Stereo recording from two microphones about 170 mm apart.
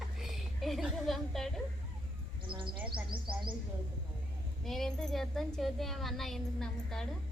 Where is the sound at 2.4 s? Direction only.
30° right (ahead or behind).